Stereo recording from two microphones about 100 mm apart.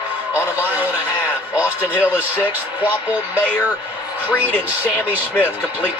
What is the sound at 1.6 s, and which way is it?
Speech, 15° left (ahead or behind).